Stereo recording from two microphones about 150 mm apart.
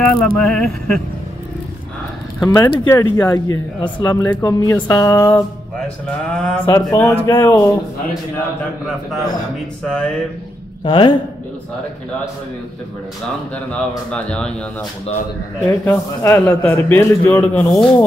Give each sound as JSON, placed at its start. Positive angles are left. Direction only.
{"t": 0.0, "sound": "a sound", "side_deg": 5}
{"t": 2.5, "sound": "speech", "side_deg": 30}
{"t": 6.0, "sound": "a man's voice", "side_deg": 10}
{"t": 9.8, "sound": "a sound", "side_deg": 5}
{"t": 10.8, "sound": "a man's voice", "side_deg": 30}
{"t": 13.7, "sound": "a man's voice", "side_deg": 5}
{"t": 15.7, "sound": "a man's voice", "side_deg": 20}